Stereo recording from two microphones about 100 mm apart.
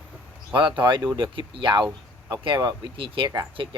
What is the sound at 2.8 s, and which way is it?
Speech, 60° right (ahead or behind).